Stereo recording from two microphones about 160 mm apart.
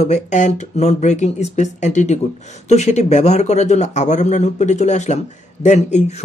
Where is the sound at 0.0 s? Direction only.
45° left (ahead or behind).